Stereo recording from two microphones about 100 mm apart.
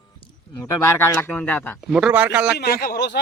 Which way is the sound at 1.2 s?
15° left (ahead or behind).